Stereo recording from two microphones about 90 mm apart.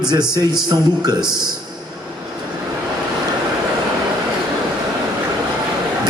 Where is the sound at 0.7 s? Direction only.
45° right (ahead or behind).